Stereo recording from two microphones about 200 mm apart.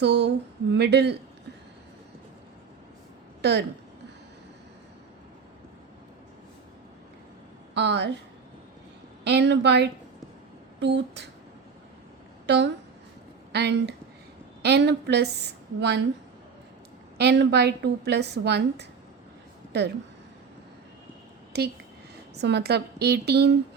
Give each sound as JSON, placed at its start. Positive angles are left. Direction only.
{"t": 0.0, "sound": "a woman's voice", "side_deg": -60}
{"t": 3.4, "sound": "a woman's voice", "side_deg": -55}
{"t": 7.7, "sound": "speech", "side_deg": -60}
{"t": 9.2, "sound": "a woman's voice", "side_deg": -60}
{"t": 12.5, "sound": "a woman's voice", "side_deg": -60}
{"t": 17.2, "sound": "a woman's voice", "side_deg": -55}
{"t": 21.5, "sound": "a woman's voice", "side_deg": -55}